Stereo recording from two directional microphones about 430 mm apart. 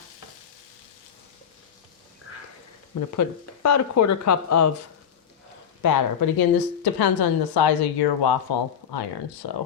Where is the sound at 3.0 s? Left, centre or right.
Left.